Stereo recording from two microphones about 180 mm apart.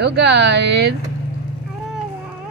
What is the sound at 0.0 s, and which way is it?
Speech, 70° right (ahead or behind).